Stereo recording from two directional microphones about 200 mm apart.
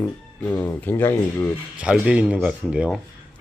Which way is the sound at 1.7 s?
5° right (ahead or behind).